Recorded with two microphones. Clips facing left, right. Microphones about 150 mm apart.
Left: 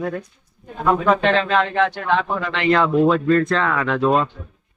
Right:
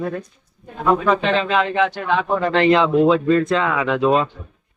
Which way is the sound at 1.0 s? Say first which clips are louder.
Left 1 dB; 5° right (ahead or behind).